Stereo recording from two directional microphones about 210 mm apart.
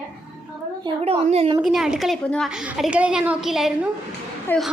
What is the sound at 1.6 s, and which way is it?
A woman's voice, centre (ahead or behind).